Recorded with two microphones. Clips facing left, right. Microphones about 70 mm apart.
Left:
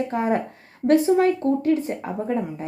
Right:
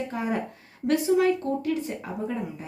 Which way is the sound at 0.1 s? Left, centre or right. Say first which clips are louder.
Left 6 dB; left.